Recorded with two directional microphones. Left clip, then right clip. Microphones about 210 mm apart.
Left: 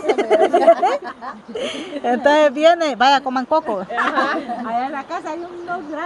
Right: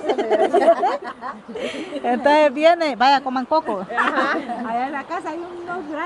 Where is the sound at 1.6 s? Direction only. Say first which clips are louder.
Left 2 dB; 10° left (ahead or behind).